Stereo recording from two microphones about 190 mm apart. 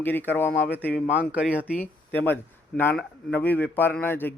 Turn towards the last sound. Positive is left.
turn(degrees=10)  # may be behind; listen again after turning